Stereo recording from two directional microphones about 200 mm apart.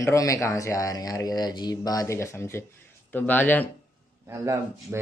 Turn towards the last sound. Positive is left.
turn(degrees=-15)  # may be behind; listen again after turning